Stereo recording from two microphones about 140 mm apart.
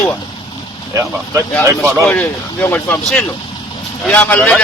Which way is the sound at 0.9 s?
20° right (ahead or behind).